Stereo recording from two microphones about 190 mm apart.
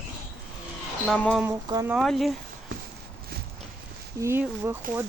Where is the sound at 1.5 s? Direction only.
20° right (ahead or behind).